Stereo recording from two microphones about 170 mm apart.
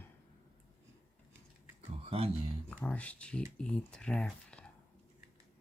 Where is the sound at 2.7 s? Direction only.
5° left (ahead or behind).